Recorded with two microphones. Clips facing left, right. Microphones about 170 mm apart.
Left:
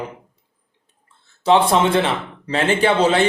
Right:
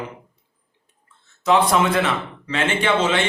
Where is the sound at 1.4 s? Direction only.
30° left (ahead or behind).